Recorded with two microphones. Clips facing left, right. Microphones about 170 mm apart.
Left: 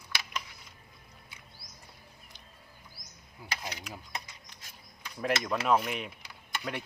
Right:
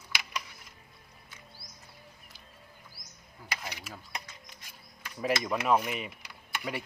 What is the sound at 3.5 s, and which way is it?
Mechanisms, 5° right (ahead or behind).